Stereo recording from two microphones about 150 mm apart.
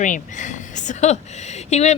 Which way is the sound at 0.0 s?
55° left (ahead or behind).